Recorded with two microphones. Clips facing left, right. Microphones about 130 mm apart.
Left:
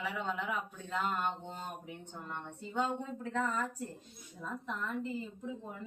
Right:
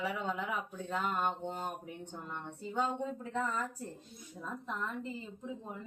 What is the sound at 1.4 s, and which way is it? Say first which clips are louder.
Speech: right 4 dB; 40° right (ahead or behind).